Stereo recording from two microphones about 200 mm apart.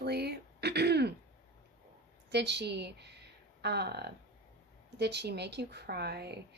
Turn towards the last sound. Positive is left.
turn(degrees=-55)  # may be behind; listen again after turning